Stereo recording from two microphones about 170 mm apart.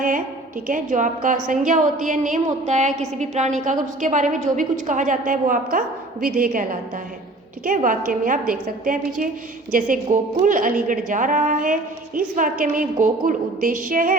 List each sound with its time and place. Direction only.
0.7 s a woman's voice: 50° right (ahead or behind)